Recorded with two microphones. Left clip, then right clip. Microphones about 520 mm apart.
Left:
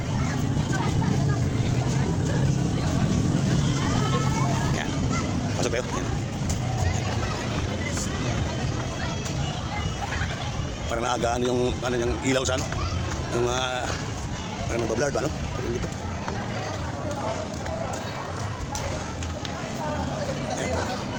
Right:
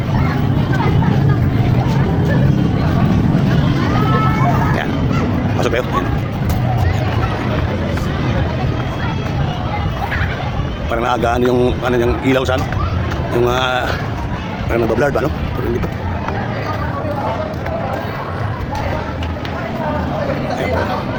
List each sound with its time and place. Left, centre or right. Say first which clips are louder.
5.5 s vehicle: right 10 dB; left
10.9 s a man's voice: right 10 dB; left